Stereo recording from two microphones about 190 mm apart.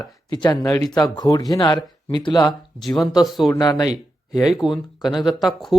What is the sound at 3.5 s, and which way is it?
Speech, 20° left (ahead or behind).